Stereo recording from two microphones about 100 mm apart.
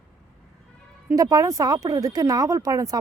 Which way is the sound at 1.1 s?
35° right (ahead or behind).